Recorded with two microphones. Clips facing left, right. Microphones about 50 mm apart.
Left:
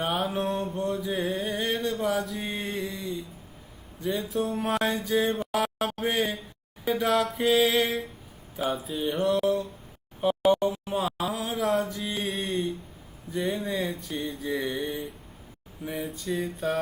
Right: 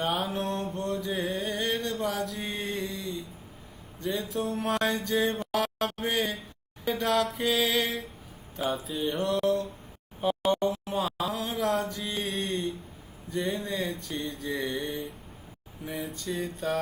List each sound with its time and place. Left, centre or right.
0.0 s mantra: centre
4.0 s music: centre
6.8 s a sound: centre